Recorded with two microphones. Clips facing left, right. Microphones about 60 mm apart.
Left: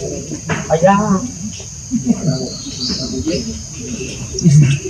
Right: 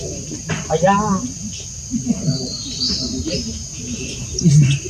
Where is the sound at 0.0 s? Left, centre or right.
Left.